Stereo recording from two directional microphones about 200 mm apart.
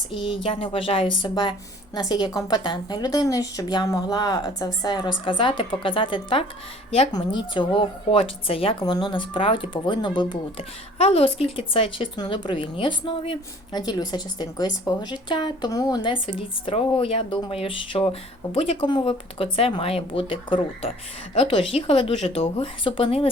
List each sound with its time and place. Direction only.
0.1 s speech: 25° left (ahead or behind)